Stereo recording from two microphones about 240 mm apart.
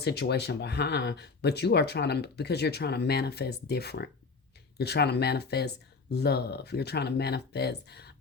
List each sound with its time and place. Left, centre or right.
0.0 s speech: left